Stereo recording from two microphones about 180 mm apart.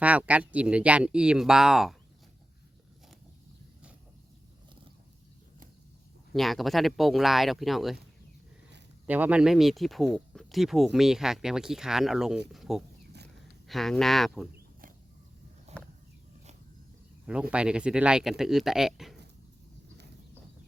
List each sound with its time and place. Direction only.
0.0 s speech: 5° right (ahead or behind)
6.3 s speech: centre (ahead or behind)
9.0 s speech: 10° right (ahead or behind)
14.5 s a sound: 50° right (ahead or behind)
15.7 s a sound: 35° right (ahead or behind)
17.5 s speech: 5° right (ahead or behind)